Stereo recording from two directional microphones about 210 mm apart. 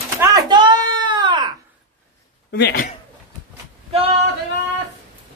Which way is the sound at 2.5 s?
50° left (ahead or behind).